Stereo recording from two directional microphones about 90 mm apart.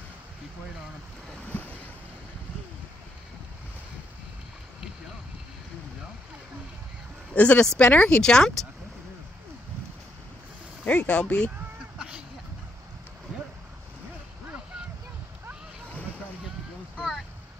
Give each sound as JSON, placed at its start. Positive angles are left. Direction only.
{"t": 7.3, "sound": "speech", "side_deg": 15}
{"t": 10.9, "sound": "speech", "side_deg": 10}
{"t": 16.9, "sound": "boat", "side_deg": -5}